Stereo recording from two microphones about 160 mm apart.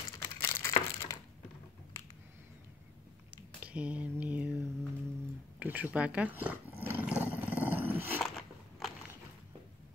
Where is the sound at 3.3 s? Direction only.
10° right (ahead or behind).